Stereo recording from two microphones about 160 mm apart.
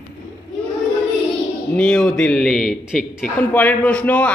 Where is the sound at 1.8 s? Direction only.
5° left (ahead or behind).